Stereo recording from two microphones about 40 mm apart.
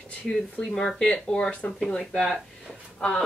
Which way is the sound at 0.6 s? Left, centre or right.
Centre.